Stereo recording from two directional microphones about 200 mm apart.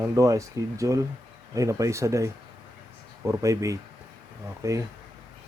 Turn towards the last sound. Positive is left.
turn(degrees=-15)  # may be behind; listen again after turning